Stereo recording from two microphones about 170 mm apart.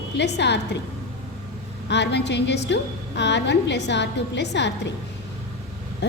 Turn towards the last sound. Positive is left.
turn(degrees=90)